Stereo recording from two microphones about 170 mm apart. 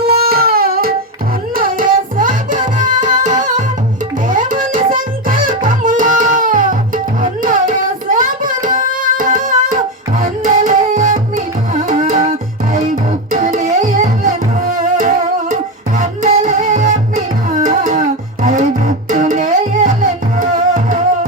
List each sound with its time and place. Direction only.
0.0 s music: 65° right (ahead or behind)
13.3 s music: 50° right (ahead or behind)